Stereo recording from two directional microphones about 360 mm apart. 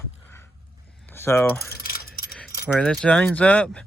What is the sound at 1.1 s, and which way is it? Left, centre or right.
Speech, centre.